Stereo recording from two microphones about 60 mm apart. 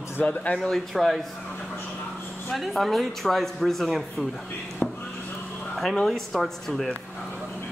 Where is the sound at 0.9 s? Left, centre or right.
Centre.